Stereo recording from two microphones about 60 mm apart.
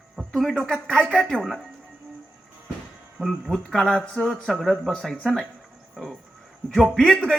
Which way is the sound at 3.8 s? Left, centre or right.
Centre.